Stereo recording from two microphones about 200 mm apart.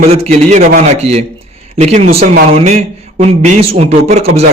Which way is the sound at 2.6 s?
30° right (ahead or behind).